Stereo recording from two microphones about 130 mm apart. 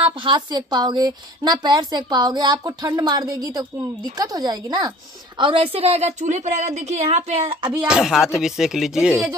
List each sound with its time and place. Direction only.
0.0 s a woman's voice: 35° right (ahead or behind)
5.4 s a woman's voice: 45° right (ahead or behind)
7.7 s speech: 10° right (ahead or behind)